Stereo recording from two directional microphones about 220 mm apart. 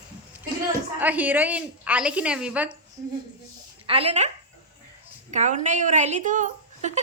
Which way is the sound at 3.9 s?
25° right (ahead or behind).